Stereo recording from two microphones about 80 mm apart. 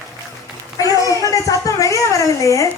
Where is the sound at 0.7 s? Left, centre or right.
Left.